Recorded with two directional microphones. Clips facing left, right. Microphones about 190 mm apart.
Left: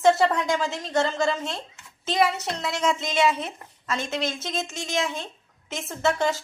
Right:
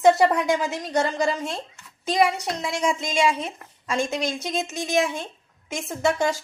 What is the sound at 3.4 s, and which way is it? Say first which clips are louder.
Speech: right 2 dB; 10° right (ahead or behind).